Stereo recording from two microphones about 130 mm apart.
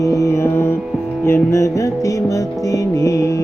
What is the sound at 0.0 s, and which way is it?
Music, 25° left (ahead or behind).